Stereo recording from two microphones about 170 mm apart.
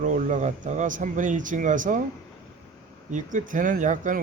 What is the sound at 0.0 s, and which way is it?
Speech, 45° right (ahead or behind).